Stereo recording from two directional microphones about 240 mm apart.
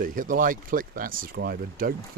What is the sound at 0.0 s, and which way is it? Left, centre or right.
Speech, right.